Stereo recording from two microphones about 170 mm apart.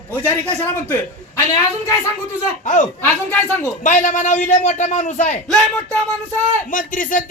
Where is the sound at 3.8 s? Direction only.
50° left (ahead or behind).